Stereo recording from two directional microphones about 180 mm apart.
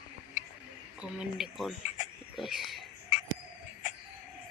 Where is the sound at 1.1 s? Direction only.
Centre (ahead or behind).